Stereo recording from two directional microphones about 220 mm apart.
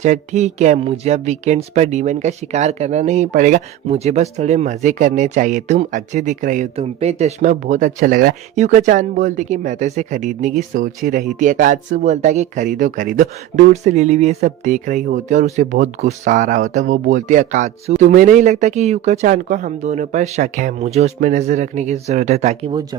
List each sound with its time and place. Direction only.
0.0 s speech: 35° right (ahead or behind)